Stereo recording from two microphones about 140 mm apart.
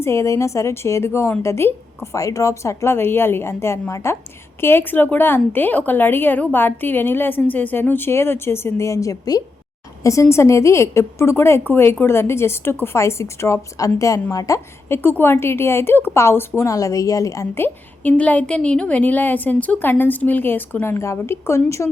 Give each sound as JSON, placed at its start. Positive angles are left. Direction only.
{"t": 0.0, "sound": "a woman's voice", "side_deg": 20}